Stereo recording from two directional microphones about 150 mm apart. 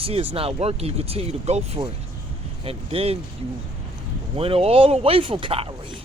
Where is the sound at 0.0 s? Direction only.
40° right (ahead or behind).